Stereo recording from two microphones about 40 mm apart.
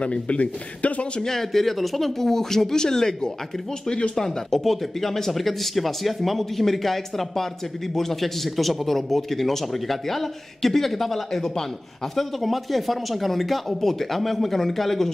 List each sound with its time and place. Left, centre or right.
0.0 s speech: left
1.2 s a man's voice: centre